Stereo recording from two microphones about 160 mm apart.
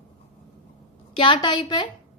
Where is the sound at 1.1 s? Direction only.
30° left (ahead or behind).